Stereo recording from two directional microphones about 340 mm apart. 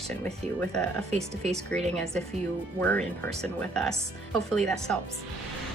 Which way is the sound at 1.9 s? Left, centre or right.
Centre.